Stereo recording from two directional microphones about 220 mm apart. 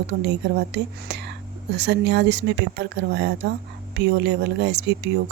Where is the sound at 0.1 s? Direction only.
50° right (ahead or behind).